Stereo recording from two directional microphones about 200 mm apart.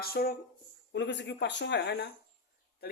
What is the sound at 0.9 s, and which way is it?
Speech, 60° left (ahead or behind).